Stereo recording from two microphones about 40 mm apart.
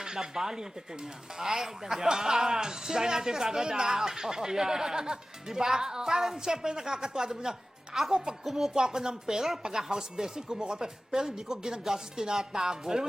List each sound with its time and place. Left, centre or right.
0.0 s a man's voice: centre